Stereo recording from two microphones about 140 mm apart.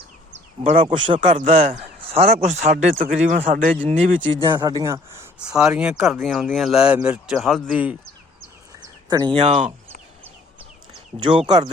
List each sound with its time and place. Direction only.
0.6 s speech: 50° right (ahead or behind)
1.1 s speech: 65° right (ahead or behind)
1.4 s speech: 55° right (ahead or behind)
2.0 s a sound: 45° right (ahead or behind)
2.4 s speech: 55° right (ahead or behind); by 3.7 s 75° right (ahead or behind)
3.8 s speech: 55° right (ahead or behind)
4.4 s speech: 30° right (ahead or behind)
5.4 s speech: 5° right (ahead or behind)
9.0 s speech: 30° right (ahead or behind)
9.3 s speech: 50° right (ahead or behind)
11.3 s speech: 35° right (ahead or behind)